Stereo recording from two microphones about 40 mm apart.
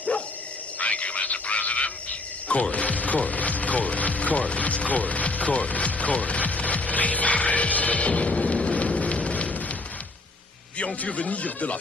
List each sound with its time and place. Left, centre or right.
0.7 s a sound: left
2.4 s speech: left
8.1 s music: left
8.6 s rain: left
9.0 s a sound: left
11.0 s speech: left